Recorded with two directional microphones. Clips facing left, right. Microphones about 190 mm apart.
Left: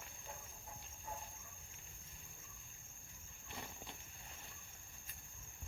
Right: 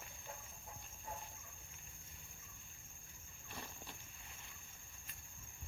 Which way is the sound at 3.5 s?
20° left (ahead or behind).